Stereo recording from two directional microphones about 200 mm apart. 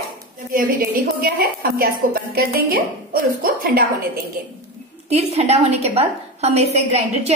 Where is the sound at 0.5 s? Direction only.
45° right (ahead or behind).